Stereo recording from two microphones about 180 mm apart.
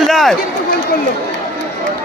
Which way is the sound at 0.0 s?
Centre (ahead or behind).